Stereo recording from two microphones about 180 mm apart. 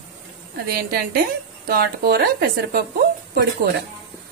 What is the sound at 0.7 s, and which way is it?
A woman's voice, 55° right (ahead or behind).